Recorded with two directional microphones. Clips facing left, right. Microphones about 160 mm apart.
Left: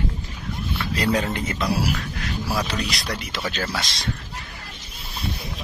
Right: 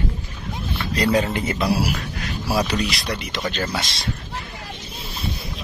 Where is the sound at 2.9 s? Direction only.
Centre (ahead or behind).